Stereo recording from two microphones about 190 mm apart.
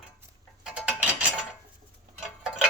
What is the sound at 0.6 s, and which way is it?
Cutlery, 5° right (ahead or behind).